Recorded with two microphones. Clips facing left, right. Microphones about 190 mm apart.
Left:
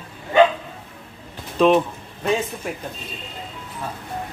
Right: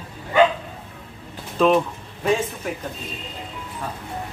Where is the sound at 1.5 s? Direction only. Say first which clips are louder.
Left 2 dB; centre (ahead or behind).